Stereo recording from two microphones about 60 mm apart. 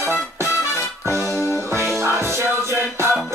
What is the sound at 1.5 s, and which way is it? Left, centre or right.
Music, right.